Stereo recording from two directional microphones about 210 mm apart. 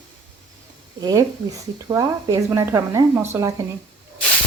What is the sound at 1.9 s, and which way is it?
Speech, 15° right (ahead or behind).